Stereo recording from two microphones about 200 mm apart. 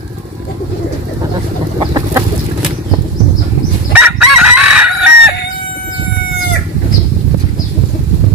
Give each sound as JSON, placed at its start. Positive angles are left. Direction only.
{"t": 1.8, "sound": "chicken", "side_deg": -20}
{"t": 3.9, "sound": "chicken", "side_deg": -10}